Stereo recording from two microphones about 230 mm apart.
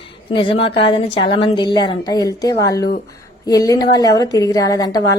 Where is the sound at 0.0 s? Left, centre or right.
Left.